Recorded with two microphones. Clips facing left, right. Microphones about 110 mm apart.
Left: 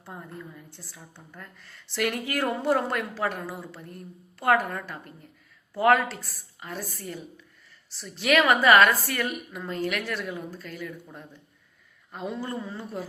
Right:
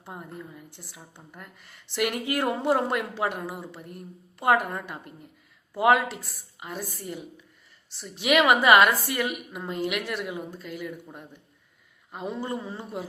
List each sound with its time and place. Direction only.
0.0 s a woman's voice: 15° right (ahead or behind)
12.3 s a woman's voice: 15° right (ahead or behind)